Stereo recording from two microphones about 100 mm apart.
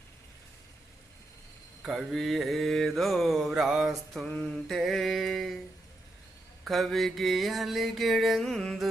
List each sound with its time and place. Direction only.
1.8 s mantra: centre (ahead or behind)
6.7 s mantra: centre (ahead or behind)